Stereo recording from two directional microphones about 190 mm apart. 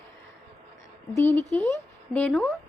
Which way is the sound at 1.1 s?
10° left (ahead or behind).